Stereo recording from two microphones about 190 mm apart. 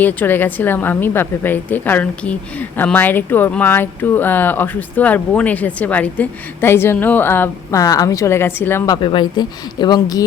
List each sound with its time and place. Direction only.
0.0 s a woman's voice: 10° left (ahead or behind)
9.0 s speech: 25° left (ahead or behind)